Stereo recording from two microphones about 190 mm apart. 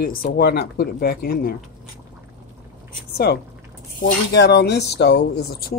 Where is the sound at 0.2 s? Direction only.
55° left (ahead or behind).